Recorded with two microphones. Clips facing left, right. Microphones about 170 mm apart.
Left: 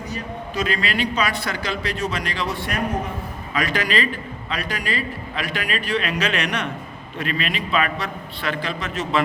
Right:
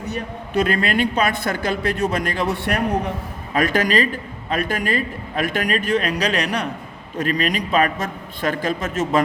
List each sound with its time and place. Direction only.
0.1 s a man's voice: 60° right (ahead or behind)
3.5 s a man's voice: 50° right (ahead or behind)